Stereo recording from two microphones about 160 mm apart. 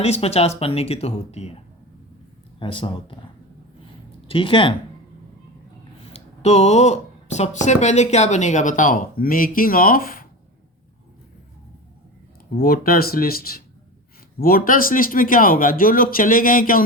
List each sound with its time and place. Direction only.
0.0 s speech: 40° left (ahead or behind)
2.6 s speech: 30° left (ahead or behind)
4.3 s speech: 30° left (ahead or behind)
6.1 s speech: 45° left (ahead or behind); by 10.2 s 65° left (ahead or behind)
12.5 s speech: 65° left (ahead or behind)